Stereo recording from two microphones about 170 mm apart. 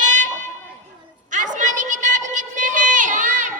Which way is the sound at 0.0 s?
50° right (ahead or behind).